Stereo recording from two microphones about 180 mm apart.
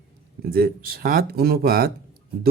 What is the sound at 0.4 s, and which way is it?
A man's voice, 55° right (ahead or behind).